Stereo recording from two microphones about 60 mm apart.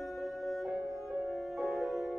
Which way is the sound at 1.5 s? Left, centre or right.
Centre.